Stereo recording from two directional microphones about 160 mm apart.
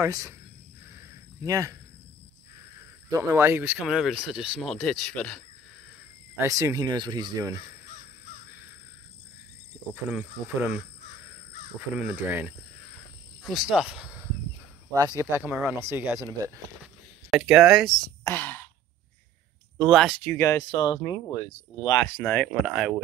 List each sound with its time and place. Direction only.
0.0 s speech: 20° right (ahead or behind)
1.4 s speech: 20° right (ahead or behind)
3.1 s speech: 20° right (ahead or behind)
3.8 s speech: 5° right (ahead or behind)
6.3 s speech: 20° right (ahead or behind)
10.1 s speech: 5° right (ahead or behind)
12.0 s speech: 10° right (ahead or behind)
15.0 s speech: 20° right (ahead or behind)
16.8 s a sound: 5° right (ahead or behind)
18.2 s speech: 15° left (ahead or behind)
19.8 s speech: centre (ahead or behind)
20.3 s speech: 20° left (ahead or behind)
22.2 s speech: 10° left (ahead or behind)
22.5 s speech: 5° right (ahead or behind)